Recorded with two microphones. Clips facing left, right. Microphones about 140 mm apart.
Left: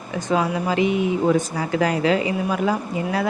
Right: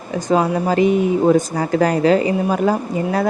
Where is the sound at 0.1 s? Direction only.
35° right (ahead or behind).